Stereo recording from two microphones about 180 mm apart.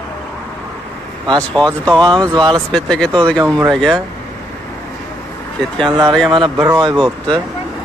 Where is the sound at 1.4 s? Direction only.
5° left (ahead or behind).